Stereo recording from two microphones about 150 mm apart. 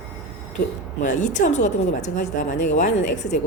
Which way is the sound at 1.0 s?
55° left (ahead or behind).